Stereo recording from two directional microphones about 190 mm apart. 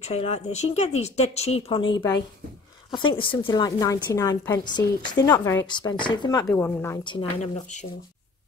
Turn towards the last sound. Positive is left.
turn(degrees=40)  # may be behind; listen again after turning